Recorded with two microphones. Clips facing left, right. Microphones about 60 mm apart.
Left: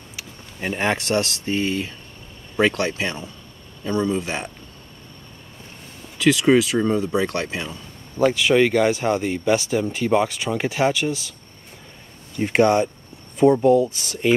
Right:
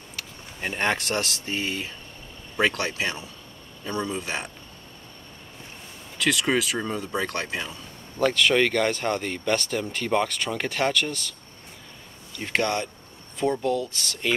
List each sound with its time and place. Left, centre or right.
0.1 s speech: centre
6.1 s speech: centre
12.4 s speech: centre